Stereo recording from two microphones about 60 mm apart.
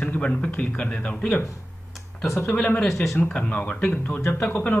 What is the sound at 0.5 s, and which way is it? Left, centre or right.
Speech, centre.